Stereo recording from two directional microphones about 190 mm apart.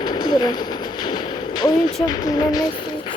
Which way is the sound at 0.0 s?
20° left (ahead or behind).